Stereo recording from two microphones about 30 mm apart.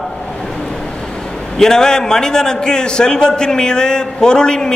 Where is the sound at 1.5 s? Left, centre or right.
Centre.